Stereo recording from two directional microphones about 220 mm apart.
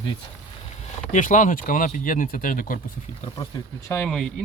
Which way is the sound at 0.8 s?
35° left (ahead or behind).